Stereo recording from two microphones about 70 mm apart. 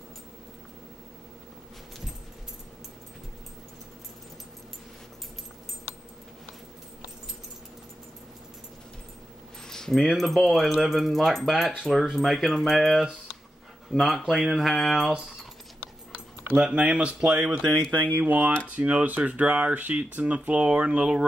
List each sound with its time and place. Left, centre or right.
9.7 s speech: centre
16.7 s speech: centre
17.6 s speech: centre
18.0 s speech: right